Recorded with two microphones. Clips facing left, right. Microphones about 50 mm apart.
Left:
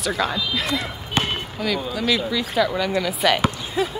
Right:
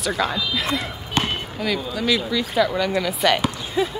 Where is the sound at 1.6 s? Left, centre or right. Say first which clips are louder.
Even; centre.